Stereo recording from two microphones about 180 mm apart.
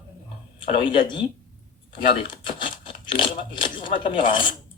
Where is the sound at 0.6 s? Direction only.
25° left (ahead or behind).